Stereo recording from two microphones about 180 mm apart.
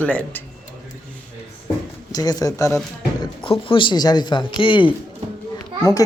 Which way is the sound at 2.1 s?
20° left (ahead or behind).